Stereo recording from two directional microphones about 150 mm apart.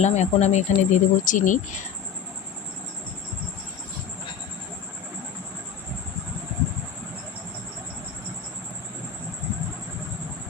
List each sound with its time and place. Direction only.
0.0 s speech: 50° left (ahead or behind)